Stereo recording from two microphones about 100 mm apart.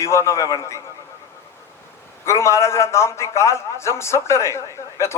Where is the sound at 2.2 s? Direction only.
30° left (ahead or behind).